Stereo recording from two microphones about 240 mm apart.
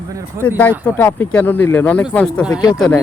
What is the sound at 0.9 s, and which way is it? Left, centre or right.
Speech, centre.